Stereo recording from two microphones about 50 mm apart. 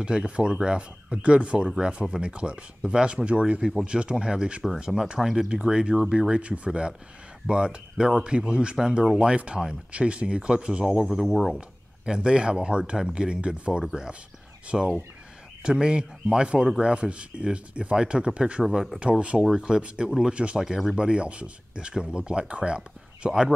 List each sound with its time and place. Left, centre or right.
0.0 s speech: centre
5.2 s speech: centre
5.5 s speech: centre
11.1 s speech: centre
12.1 s speech: centre
18.6 s speech: centre
18.9 s speech: right